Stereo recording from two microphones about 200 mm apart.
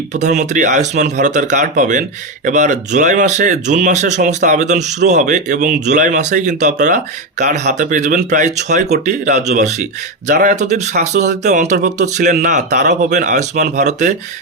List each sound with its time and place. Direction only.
0.1 s speech: 35° right (ahead or behind)